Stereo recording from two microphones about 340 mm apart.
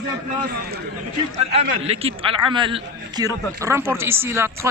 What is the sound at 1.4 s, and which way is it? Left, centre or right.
A man's voice, centre.